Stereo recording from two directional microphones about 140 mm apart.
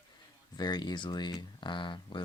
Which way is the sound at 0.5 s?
30° left (ahead or behind).